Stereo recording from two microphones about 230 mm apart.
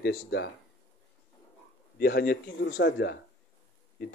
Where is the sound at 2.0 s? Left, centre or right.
Left.